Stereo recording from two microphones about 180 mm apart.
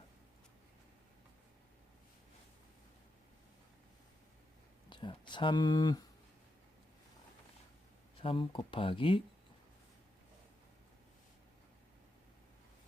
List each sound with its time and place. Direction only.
4.9 s speech: 25° left (ahead or behind)
8.1 s speech: 30° left (ahead or behind)